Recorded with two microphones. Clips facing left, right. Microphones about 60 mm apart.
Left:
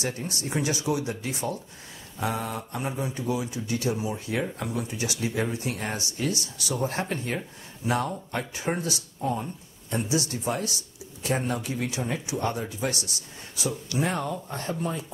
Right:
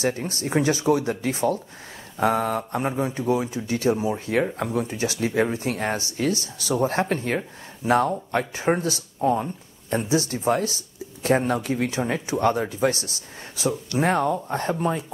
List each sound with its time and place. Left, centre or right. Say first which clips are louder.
0.0 s speech: right 6 dB; right
12.1 s speech: right 7 dB; right